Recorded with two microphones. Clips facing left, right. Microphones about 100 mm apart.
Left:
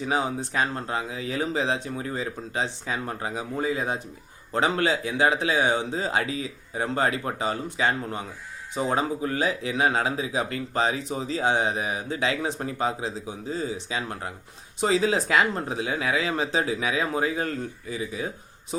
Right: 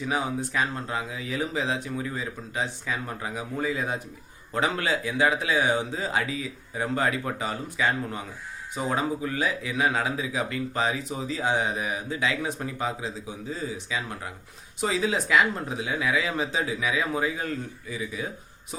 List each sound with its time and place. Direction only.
0.0 s speech: 30° left (ahead or behind)